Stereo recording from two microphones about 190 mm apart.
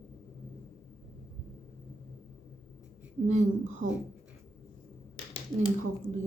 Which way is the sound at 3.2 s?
40° right (ahead or behind).